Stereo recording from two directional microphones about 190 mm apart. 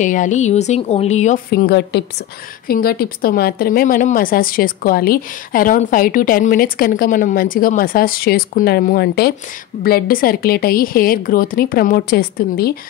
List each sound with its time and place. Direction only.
0.0 s a woman's voice: 40° left (ahead or behind)
1.5 s a woman's voice: 55° left (ahead or behind)